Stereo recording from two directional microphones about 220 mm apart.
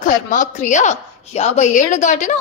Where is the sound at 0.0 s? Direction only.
35° left (ahead or behind).